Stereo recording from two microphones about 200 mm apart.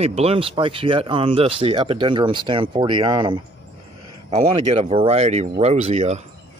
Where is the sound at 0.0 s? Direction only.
30° right (ahead or behind).